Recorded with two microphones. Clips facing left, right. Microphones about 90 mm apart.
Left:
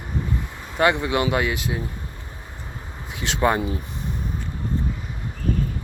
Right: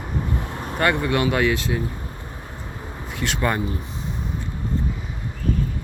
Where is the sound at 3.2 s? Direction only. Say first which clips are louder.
Left 3 dB; 20° left (ahead or behind).